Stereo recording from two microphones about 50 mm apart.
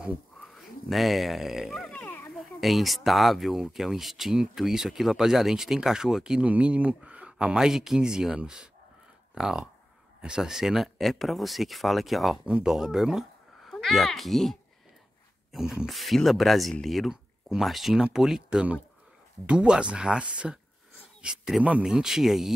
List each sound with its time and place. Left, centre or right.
0.6 s speech: centre
6.4 s speech: right; by 13.7 s centre
13.7 s speech: centre
15.5 s speech: centre